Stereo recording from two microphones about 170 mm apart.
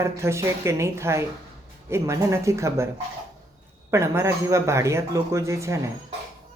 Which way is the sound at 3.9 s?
15° right (ahead or behind).